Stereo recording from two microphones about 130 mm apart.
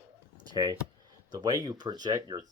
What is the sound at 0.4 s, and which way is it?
Speech, 35° right (ahead or behind).